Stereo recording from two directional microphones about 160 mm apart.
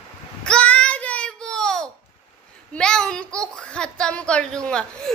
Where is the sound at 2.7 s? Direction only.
5° left (ahead or behind).